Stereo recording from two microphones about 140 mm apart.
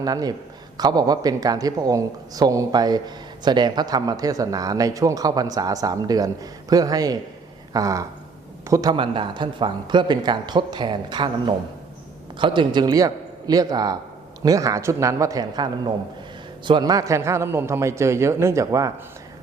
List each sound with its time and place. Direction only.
0.0 s speech: 25° right (ahead or behind)
9.0 s a man's voice: 35° right (ahead or behind)